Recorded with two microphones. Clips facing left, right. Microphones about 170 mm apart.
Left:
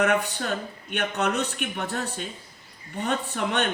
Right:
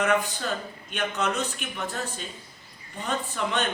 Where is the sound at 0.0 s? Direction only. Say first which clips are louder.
Left 1 dB; 65° left (ahead or behind).